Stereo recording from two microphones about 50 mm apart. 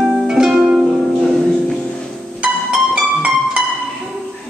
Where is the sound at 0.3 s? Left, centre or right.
Centre.